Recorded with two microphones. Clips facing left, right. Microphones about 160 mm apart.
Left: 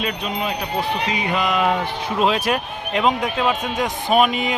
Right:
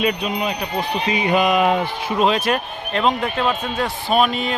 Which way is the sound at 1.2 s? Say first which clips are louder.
Right 5 dB; 20° right (ahead or behind).